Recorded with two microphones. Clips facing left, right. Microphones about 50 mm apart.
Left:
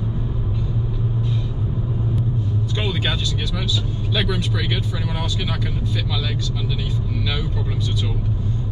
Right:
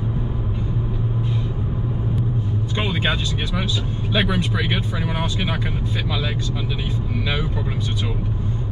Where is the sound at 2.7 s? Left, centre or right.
Right.